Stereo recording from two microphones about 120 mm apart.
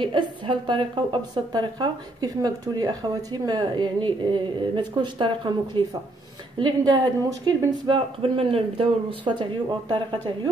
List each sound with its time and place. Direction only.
0.0 s a woman's voice: 45° right (ahead or behind)
7.8 s a woman's voice: 45° right (ahead or behind)